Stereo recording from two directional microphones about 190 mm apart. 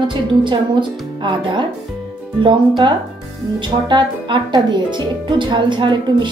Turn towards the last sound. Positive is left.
turn(degrees=-25)  # may be behind; listen again after turning